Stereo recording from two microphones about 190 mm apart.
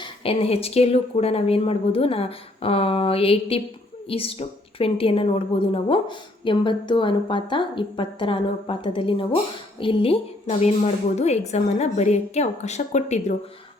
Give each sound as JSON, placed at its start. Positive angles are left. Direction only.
{"t": 0.0, "sound": "a woman's voice", "side_deg": 30}